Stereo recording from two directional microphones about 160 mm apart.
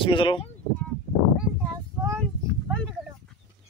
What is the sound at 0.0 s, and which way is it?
Speech, 30° left (ahead or behind).